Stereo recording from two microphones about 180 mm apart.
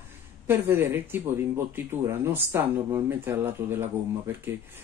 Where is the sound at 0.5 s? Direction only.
10° right (ahead or behind).